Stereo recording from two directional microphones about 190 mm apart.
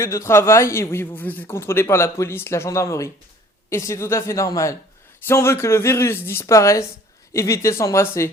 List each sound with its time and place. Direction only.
0.0 s a man's voice: 15° left (ahead or behind)